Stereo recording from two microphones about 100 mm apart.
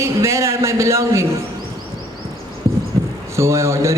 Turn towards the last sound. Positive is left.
turn(degrees=-30)  # may be behind; listen again after turning